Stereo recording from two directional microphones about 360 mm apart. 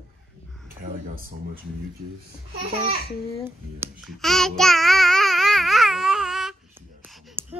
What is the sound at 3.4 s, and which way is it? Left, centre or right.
Child singing, centre.